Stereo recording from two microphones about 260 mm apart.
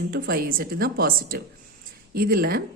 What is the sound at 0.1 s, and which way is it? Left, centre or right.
A woman's voice, right.